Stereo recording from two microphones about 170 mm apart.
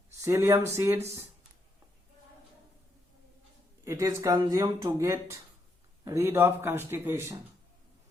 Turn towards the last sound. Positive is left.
turn(degrees=-15)  # may be behind; listen again after turning